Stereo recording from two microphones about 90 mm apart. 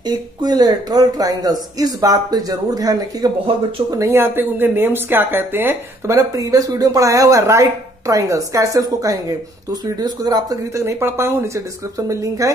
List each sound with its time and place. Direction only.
0.0 s speech: 50° right (ahead or behind)
3.9 s speech: 30° right (ahead or behind)